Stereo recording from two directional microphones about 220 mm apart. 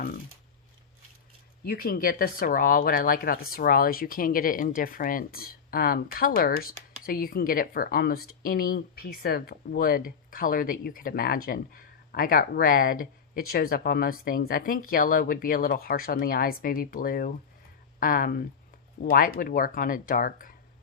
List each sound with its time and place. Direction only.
1.6 s speech: 45° left (ahead or behind)